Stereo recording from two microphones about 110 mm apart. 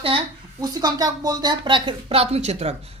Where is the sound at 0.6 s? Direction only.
40° right (ahead or behind).